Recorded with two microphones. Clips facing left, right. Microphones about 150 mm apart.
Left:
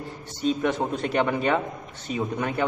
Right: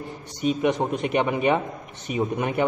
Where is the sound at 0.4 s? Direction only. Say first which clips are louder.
Right 2 dB; 10° right (ahead or behind).